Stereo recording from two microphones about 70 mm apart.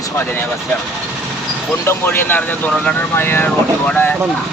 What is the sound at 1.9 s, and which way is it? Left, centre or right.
Speech, left.